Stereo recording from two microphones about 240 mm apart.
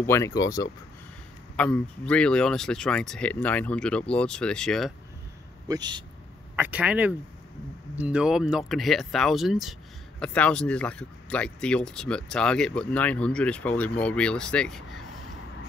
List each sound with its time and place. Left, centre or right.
0.0 s speech: centre
5.7 s speech: centre
6.5 s speech: centre